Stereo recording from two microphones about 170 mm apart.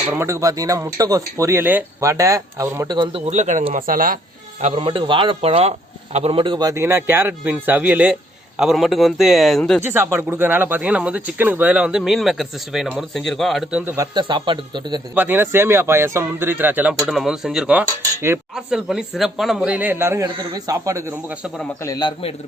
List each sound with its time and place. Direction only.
0.1 s speech: 15° right (ahead or behind); by 4.2 s 55° right (ahead or behind)
4.7 s speech: 30° right (ahead or behind); by 9.8 s 5° left (ahead or behind)
9.8 s speech: 15° right (ahead or behind)
15.1 s speech: 10° right (ahead or behind)
21.8 s a man's voice: 20° left (ahead or behind)